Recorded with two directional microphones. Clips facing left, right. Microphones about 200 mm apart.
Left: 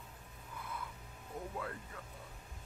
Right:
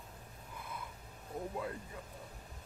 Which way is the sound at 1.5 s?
20° right (ahead or behind).